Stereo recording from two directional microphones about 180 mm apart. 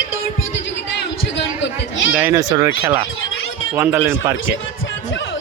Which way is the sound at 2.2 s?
10° right (ahead or behind).